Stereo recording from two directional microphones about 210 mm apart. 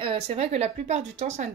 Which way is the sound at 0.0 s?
25° right (ahead or behind).